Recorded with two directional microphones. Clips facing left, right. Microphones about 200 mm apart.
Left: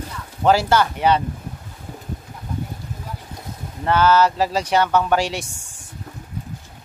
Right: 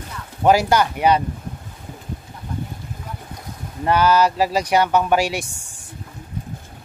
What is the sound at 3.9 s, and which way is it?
Speech, 15° right (ahead or behind).